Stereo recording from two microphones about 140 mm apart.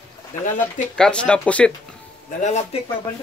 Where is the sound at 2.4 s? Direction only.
55° left (ahead or behind).